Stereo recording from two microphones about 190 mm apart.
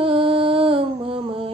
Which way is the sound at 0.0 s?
30° right (ahead or behind).